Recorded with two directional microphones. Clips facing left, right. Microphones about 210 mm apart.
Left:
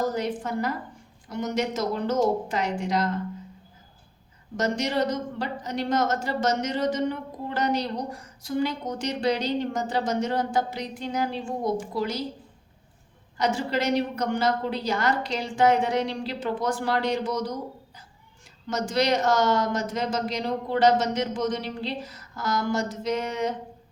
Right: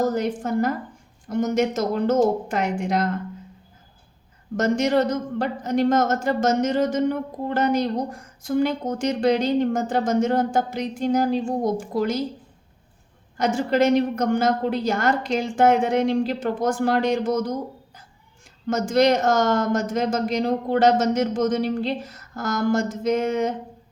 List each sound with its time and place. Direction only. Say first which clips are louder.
0.0 s speech: right 4 dB; 45° right (ahead or behind)
4.5 s speech: right 6 dB; 50° right (ahead or behind)
13.3 s speech: right 4 dB; 50° right (ahead or behind)
18.7 s speech: right 6 dB; 50° right (ahead or behind)